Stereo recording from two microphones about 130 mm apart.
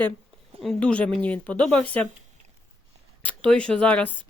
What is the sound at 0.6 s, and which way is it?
Speech, 5° left (ahead or behind).